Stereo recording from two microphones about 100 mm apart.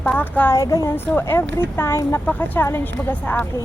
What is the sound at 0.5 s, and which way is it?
Speech, 35° left (ahead or behind).